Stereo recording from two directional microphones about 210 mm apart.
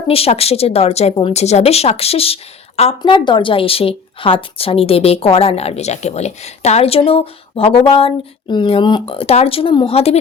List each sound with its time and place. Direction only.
0.1 s speech: 30° left (ahead or behind)